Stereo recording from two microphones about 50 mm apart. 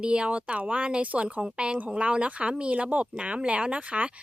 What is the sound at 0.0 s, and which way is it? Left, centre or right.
Speech, right.